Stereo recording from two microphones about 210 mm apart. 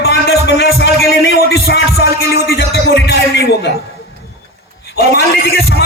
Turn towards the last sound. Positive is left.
turn(degrees=50)  # may be behind; listen again after turning